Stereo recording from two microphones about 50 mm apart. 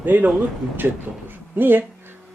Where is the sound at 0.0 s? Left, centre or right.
Right.